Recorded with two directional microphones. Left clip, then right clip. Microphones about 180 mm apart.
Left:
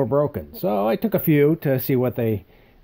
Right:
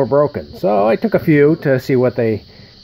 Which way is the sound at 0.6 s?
40° left (ahead or behind).